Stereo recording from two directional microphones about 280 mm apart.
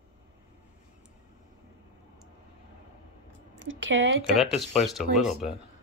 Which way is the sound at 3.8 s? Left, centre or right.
Right.